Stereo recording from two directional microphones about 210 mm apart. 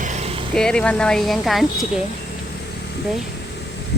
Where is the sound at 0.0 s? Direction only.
35° right (ahead or behind).